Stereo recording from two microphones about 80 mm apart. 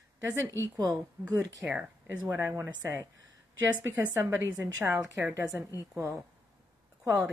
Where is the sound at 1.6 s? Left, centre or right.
Centre.